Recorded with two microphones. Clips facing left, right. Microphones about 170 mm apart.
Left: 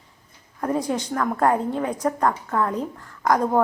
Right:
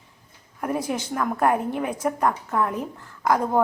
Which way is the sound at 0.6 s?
15° right (ahead or behind).